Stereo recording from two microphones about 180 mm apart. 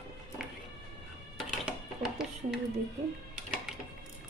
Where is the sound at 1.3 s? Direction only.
Centre (ahead or behind).